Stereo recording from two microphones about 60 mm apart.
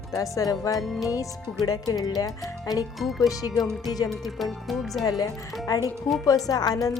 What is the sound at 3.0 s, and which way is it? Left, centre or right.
Speech, centre.